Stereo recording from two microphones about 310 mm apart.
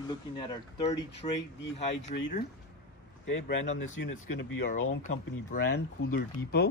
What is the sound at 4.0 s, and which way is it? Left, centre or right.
Speech, left.